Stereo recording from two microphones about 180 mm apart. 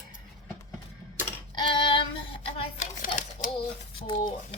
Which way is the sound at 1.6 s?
30° left (ahead or behind).